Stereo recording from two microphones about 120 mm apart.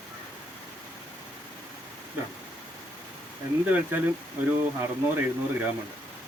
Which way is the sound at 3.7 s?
15° right (ahead or behind).